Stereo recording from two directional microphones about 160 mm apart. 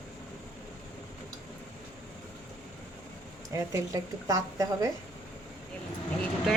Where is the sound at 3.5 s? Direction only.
20° right (ahead or behind).